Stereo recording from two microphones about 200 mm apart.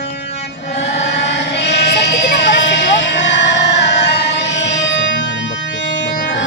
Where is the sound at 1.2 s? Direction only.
60° left (ahead or behind).